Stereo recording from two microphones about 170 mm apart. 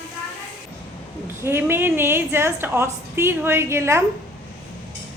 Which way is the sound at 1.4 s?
15° right (ahead or behind).